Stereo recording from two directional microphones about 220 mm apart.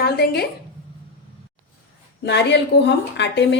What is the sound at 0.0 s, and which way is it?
Speech, 45° left (ahead or behind).